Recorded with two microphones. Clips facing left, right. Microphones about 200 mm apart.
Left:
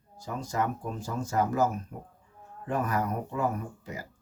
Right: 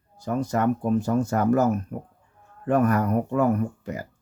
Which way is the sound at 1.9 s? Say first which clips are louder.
Right 8 dB; 70° right (ahead or behind).